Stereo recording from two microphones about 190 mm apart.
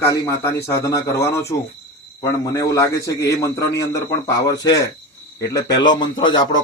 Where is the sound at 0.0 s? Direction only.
15° left (ahead or behind).